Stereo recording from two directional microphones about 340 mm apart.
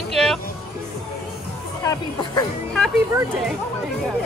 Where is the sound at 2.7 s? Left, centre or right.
Centre.